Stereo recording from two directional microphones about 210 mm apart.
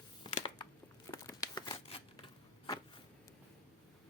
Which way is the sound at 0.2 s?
25° left (ahead or behind).